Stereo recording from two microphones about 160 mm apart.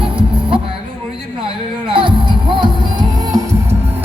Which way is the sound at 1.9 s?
30° right (ahead or behind).